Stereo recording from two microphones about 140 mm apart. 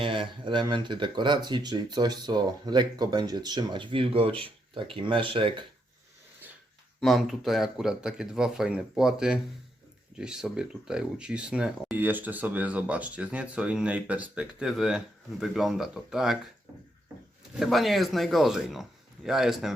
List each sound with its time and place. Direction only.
0.0 s speech: 35° right (ahead or behind)
7.0 s speech: centre (ahead or behind)
17.6 s speech: centre (ahead or behind)